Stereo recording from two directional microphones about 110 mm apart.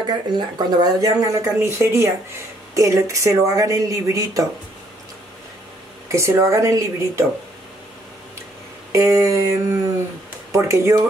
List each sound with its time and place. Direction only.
0.0 s speech: 45° right (ahead or behind)
6.1 s speech: 30° right (ahead or behind)
8.9 s speech: 30° right (ahead or behind)